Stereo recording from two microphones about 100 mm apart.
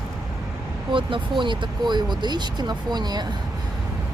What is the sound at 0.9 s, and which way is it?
Speech, 55° right (ahead or behind).